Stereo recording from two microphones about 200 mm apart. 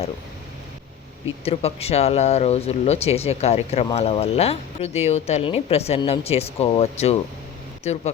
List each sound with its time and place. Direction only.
1.5 s speech: 30° left (ahead or behind)